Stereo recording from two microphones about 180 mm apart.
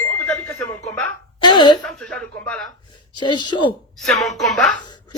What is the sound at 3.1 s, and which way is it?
Speech, 25° left (ahead or behind).